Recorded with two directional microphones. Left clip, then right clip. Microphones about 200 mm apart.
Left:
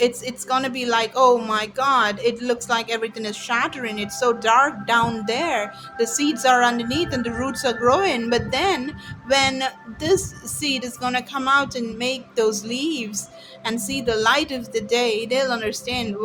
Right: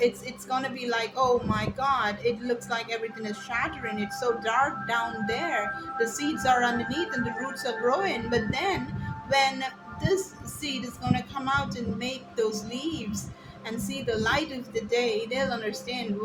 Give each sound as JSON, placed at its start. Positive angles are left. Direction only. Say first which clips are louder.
{"t": 0.0, "sound": "speech", "louder": "left 5 dB", "side_deg": 55}
{"t": 9.3, "sound": "music", "louder": "left 5 dB", "side_deg": 55}
{"t": 10.6, "sound": "speech", "louder": "left 9 dB", "side_deg": 55}